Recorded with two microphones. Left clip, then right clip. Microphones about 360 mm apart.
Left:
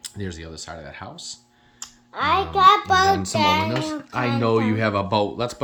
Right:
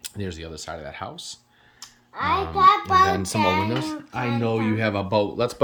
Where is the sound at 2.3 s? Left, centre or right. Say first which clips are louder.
Left 2 dB; left.